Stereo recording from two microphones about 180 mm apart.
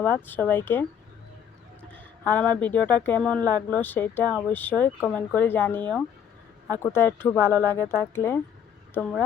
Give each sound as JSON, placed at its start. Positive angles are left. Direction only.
{"t": 0.0, "sound": "speech", "side_deg": 10}
{"t": 1.9, "sound": "speech", "side_deg": 10}